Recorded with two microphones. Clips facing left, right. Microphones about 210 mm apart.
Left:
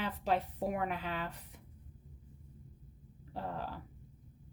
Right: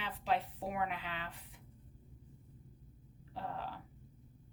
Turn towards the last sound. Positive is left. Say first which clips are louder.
# left 3 dB
turn(degrees=45)  # may be behind; listen again after turning